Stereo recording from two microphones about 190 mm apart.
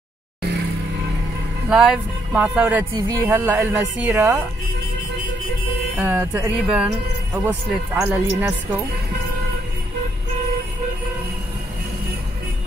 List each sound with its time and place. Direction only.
1.7 s music: 5° right (ahead or behind)
2.9 s speech: 15° right (ahead or behind)
5.9 s speech: 10° right (ahead or behind)